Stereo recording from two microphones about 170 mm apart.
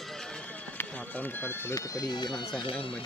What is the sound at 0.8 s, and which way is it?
Speech, 10° left (ahead or behind).